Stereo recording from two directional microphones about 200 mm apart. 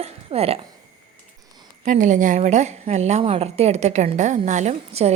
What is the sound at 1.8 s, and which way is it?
A woman's voice, 40° right (ahead or behind).